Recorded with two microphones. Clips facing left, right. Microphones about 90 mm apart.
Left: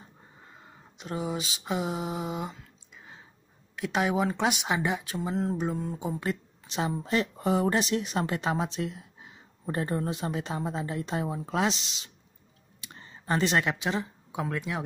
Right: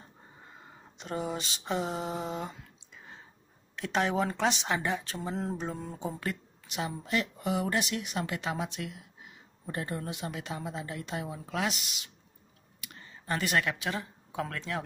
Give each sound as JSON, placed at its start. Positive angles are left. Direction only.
{"t": 0.0, "sound": "a sound", "side_deg": 5}
{"t": 3.7, "sound": "speech", "side_deg": 5}
{"t": 5.9, "sound": "speech", "side_deg": 15}
{"t": 6.7, "sound": "speech", "side_deg": 30}